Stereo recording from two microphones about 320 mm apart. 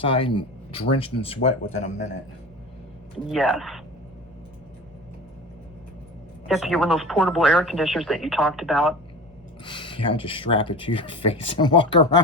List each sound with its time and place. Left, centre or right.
0.0 s speech: centre
3.2 s speech: centre
6.5 s speech: centre
9.6 s speech: centre